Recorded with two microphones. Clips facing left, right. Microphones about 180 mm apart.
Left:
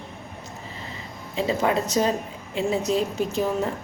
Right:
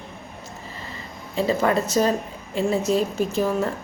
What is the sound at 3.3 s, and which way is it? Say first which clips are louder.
Speech: right 2 dB; 15° left (ahead or behind).